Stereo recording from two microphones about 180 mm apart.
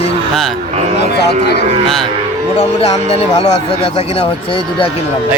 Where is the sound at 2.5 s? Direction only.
35° left (ahead or behind).